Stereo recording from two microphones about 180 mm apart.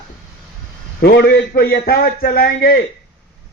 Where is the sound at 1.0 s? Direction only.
60° left (ahead or behind).